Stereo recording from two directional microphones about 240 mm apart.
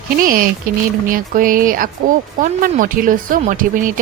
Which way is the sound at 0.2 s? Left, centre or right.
Right.